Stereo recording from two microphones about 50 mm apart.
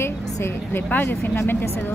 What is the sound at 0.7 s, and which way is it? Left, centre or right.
Speech, left.